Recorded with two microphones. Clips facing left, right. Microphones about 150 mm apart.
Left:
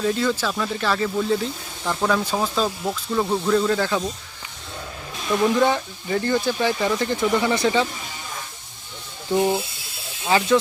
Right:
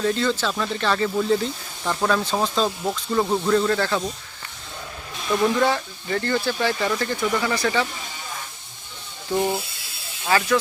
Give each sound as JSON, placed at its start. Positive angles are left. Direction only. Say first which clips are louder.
{"t": 0.0, "sound": "speech", "louder": "even", "side_deg": 10}
{"t": 5.5, "sound": "speech", "louder": "left 2 dB", "side_deg": 15}
{"t": 9.3, "sound": "speech", "louder": "left 2 dB", "side_deg": 5}
{"t": 10.2, "sound": "speech", "louder": "left 2 dB", "side_deg": 15}